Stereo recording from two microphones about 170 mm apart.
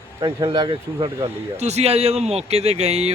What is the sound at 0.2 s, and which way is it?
Speech, 25° right (ahead or behind).